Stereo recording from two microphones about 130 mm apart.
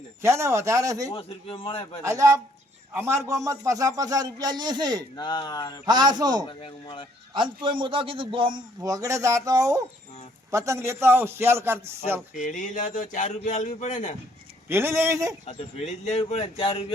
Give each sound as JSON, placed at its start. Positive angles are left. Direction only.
{"t": 0.2, "sound": "speech", "side_deg": -20}
{"t": 1.1, "sound": "speech", "side_deg": 45}
{"t": 2.0, "sound": "a man's voice", "side_deg": -25}
{"t": 5.1, "sound": "speech", "side_deg": 35}
{"t": 5.8, "sound": "a man's voice", "side_deg": -35}
{"t": 6.5, "sound": "speech", "side_deg": 40}
{"t": 7.3, "sound": "a man's voice", "side_deg": -40}
{"t": 8.8, "sound": "a man's voice", "side_deg": -25}
{"t": 12.4, "sound": "a man's voice", "side_deg": 75}
{"t": 14.7, "sound": "speech", "side_deg": -20}
{"t": 15.4, "sound": "speech", "side_deg": 55}